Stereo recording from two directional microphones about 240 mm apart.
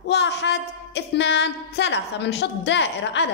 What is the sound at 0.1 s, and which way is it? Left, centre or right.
A woman's voice, left.